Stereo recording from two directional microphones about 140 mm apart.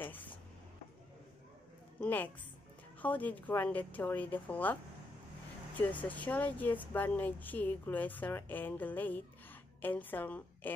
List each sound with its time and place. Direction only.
0.0 s a sound: 15° left (ahead or behind)
2.0 s a woman's voice: 10° left (ahead or behind)
5.8 s speech: 10° left (ahead or behind)